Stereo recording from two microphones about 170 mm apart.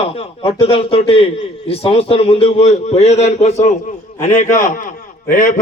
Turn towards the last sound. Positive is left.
turn(degrees=50)  # may be behind; listen again after turning